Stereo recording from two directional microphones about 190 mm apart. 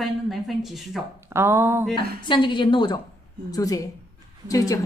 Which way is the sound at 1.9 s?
25° left (ahead or behind).